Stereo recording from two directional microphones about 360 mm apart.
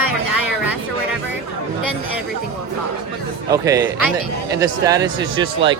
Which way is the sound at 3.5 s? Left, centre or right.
Centre.